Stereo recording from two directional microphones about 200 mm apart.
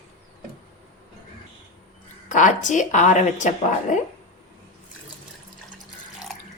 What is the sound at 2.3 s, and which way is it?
A woman's voice, 40° left (ahead or behind).